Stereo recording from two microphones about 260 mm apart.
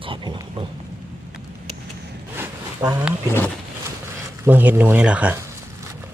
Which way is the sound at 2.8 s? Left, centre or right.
Centre.